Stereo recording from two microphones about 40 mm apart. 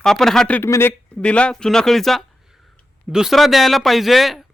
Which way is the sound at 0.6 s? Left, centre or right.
Left.